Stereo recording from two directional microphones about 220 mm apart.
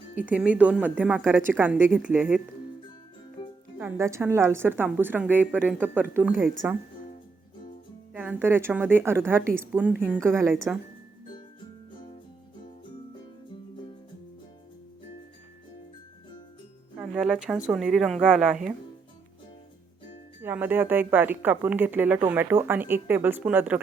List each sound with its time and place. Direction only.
0.2 s a woman's voice: 5° right (ahead or behind)
3.4 s music: 25° left (ahead or behind)
3.8 s a woman's voice: 10° right (ahead or behind)
8.1 s a woman's voice: 10° right (ahead or behind)
17.0 s speech: 5° right (ahead or behind)
20.4 s a woman's voice: 10° right (ahead or behind)